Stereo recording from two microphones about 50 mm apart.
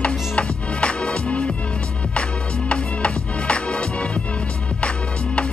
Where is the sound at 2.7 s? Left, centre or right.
Left.